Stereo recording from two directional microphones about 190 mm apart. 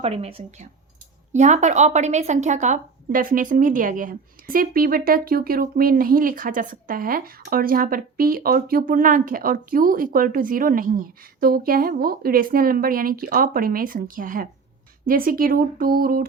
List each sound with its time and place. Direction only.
0.0 s a woman's voice: 30° right (ahead or behind); by 16.2 s 50° right (ahead or behind)